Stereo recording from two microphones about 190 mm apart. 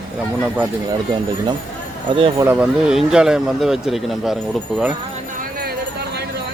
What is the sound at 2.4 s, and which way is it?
Speech, 10° right (ahead or behind).